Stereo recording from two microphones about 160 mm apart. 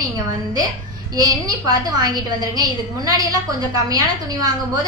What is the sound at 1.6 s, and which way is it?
A woman's voice, 25° right (ahead or behind).